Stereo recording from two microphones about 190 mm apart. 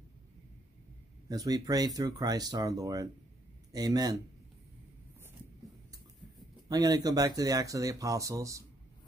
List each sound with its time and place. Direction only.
1.3 s speech: 20° right (ahead or behind)
6.7 s speech: 20° right (ahead or behind)